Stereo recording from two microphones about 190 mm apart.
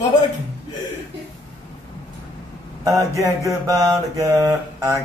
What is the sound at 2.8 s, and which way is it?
Mantra, 15° right (ahead or behind).